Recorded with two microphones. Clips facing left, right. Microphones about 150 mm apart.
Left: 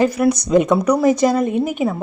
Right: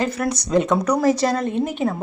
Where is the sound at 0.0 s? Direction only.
10° left (ahead or behind).